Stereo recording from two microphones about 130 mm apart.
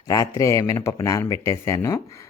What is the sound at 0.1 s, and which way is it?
Speech, 25° left (ahead or behind).